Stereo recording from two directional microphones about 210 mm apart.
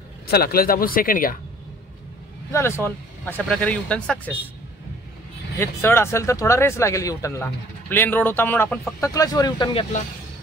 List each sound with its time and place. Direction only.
0.3 s speech: 45° left (ahead or behind)
2.5 s speech: 10° left (ahead or behind)
5.6 s speech: 10° left (ahead or behind)